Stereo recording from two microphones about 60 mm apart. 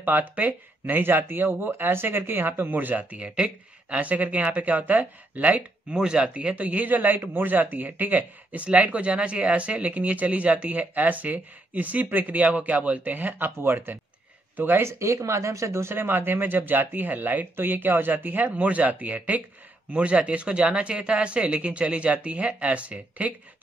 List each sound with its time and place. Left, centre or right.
0.0 s speech: right
5.9 s speech: centre
13.6 s speech: right